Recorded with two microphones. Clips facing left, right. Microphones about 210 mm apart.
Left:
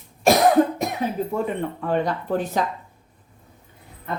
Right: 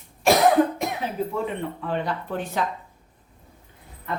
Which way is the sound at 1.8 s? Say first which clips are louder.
Left 4 dB; 45° left (ahead or behind).